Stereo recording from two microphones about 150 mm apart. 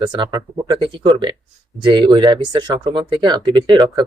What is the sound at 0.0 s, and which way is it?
Speech, 30° right (ahead or behind).